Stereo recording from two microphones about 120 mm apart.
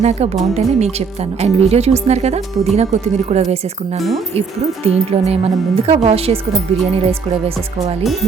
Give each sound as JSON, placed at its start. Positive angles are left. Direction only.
{"t": 0.0, "sound": "speech", "side_deg": -65}
{"t": 8.0, "sound": "speech", "side_deg": 0}